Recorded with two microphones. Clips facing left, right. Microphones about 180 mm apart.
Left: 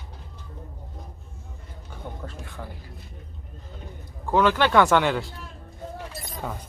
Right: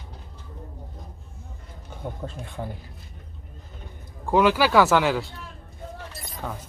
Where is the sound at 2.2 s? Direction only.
25° right (ahead or behind).